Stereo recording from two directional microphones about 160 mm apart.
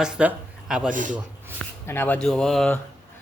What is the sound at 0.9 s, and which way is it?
Speech, 55° right (ahead or behind).